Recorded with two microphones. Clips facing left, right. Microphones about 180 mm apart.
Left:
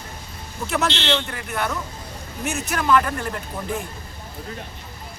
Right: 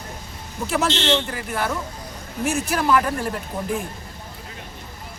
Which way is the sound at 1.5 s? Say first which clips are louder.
Even; 5° right (ahead or behind).